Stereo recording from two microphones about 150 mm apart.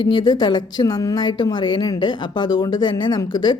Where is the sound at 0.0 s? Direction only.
30° left (ahead or behind).